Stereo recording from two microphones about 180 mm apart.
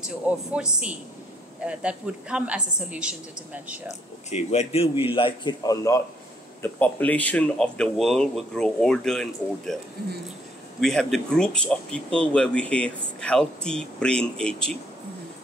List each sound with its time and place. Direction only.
0.0 s a woman's voice: 5° right (ahead or behind)
4.3 s a man's voice: 35° left (ahead or behind); by 9.8 s centre (ahead or behind)
10.8 s speech: centre (ahead or behind)